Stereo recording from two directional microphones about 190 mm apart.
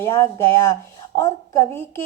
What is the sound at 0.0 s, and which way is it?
A woman's voice, 15° left (ahead or behind).